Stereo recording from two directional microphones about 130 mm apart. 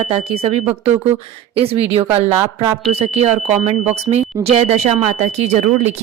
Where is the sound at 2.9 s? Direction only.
55° right (ahead or behind).